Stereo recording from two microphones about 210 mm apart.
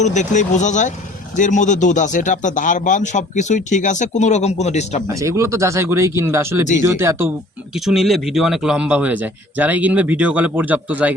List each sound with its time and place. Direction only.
0.0 s speech: 35° left (ahead or behind)
5.0 s a man's voice: 15° right (ahead or behind)
7.9 s a man's voice: centre (ahead or behind)